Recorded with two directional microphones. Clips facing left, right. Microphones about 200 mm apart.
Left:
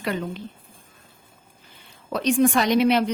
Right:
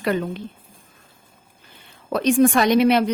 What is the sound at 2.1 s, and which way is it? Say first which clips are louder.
Speech: right 3 dB; 55° right (ahead or behind).